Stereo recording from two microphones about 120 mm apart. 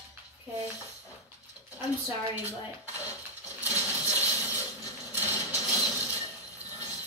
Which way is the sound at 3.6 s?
25° left (ahead or behind).